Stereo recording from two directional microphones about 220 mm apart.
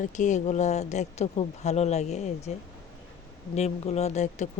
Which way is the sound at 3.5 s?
30° left (ahead or behind).